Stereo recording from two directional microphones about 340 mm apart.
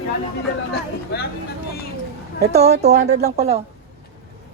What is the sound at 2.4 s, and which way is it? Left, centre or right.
Speech, centre.